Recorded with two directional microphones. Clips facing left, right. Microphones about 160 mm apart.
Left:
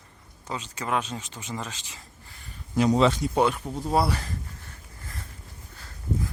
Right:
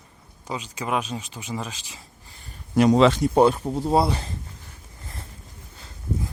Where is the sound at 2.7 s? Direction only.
80° right.